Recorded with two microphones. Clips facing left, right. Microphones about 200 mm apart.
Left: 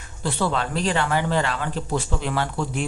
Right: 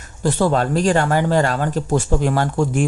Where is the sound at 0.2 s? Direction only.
45° right (ahead or behind).